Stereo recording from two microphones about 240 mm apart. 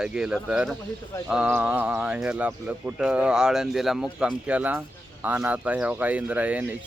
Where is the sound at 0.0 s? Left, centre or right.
Centre.